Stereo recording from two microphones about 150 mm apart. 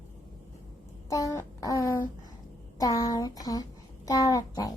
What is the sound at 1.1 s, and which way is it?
A child's voice, 25° left (ahead or behind).